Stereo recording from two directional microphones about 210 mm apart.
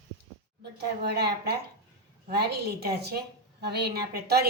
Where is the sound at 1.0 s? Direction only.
50° right (ahead or behind).